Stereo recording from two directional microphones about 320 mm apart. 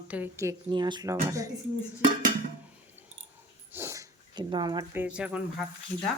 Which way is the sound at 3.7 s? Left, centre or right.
Centre.